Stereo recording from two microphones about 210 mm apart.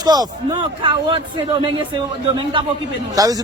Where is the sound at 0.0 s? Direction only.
20° right (ahead or behind).